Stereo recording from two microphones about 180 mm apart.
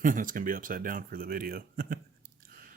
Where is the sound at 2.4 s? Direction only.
55° right (ahead or behind).